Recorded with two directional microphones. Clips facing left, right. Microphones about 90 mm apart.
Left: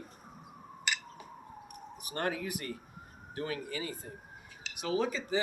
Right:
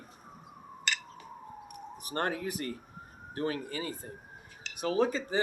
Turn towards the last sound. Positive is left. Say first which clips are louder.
# right 3 dB
turn(degrees=-40)  # may be behind; listen again after turning